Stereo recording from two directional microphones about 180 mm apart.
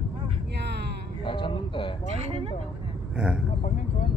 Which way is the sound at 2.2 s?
35° right (ahead or behind).